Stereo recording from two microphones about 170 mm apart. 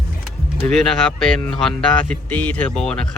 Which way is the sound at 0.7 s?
5° left (ahead or behind).